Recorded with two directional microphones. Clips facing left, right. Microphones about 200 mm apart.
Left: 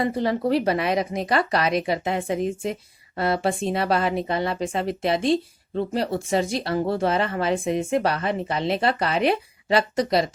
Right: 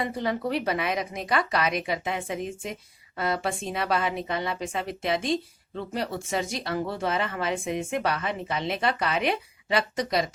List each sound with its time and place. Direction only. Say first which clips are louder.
0.0 s a woman's voice: left 5 dB; 35° left (ahead or behind)